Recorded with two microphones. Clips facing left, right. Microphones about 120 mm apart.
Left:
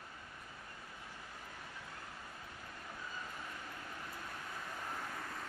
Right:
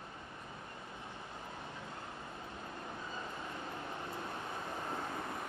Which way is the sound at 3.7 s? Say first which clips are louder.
Right 6 dB; 25° right (ahead or behind).